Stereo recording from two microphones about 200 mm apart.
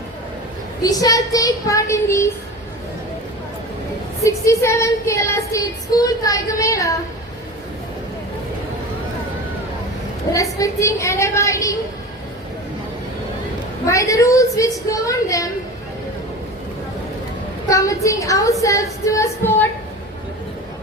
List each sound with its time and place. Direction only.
0.8 s child singing: 20° left (ahead or behind)
4.2 s child singing: 15° left (ahead or behind)
10.3 s child singing: 15° left (ahead or behind)
13.8 s child singing: 15° left (ahead or behind)
17.7 s child singing: 15° left (ahead or behind)